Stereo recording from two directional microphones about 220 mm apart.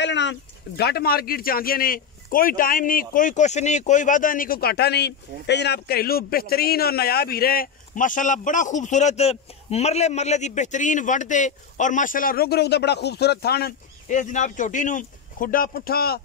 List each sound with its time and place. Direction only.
0.0 s speech: 55° left (ahead or behind)